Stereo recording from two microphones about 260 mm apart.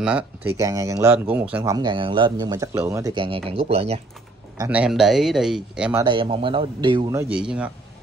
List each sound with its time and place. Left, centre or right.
0.0 s speech: centre; by 4.0 s right
4.6 s speech: centre
6.0 s speech: centre